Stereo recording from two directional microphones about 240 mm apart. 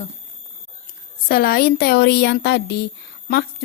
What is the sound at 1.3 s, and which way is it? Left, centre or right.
A woman's voice, left.